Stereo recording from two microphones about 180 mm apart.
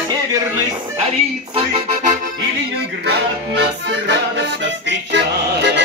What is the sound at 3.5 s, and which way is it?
Music, 75° right (ahead or behind).